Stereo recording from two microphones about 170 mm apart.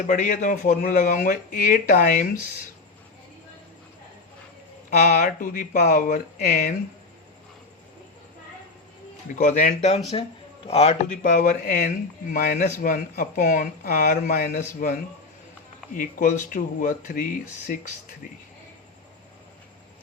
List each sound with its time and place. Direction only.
0.0 s speech: 45° left (ahead or behind)
4.9 s speech: 50° left (ahead or behind)
9.3 s a man's voice: 45° left (ahead or behind)
11.2 s speech: 45° left (ahead or behind)
16.0 s speech: 50° left (ahead or behind)